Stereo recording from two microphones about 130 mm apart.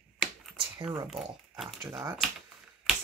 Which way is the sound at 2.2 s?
Centre (ahead or behind).